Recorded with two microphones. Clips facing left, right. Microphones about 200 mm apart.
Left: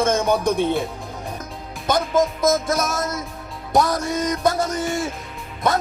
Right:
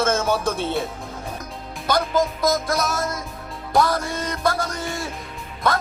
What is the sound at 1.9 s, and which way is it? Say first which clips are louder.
Music: left 2 dB; 25° left (ahead or behind).